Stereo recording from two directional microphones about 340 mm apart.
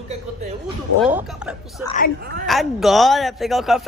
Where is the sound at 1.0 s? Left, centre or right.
Centre.